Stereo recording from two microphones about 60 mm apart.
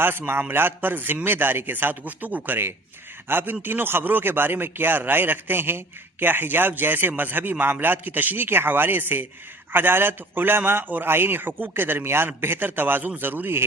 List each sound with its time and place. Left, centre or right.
0.0 s a man's voice: right